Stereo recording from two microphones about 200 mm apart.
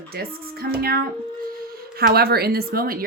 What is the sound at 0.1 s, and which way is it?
Speech, 50° right (ahead or behind).